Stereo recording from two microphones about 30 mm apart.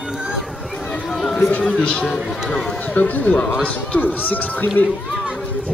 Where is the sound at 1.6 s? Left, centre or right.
Left.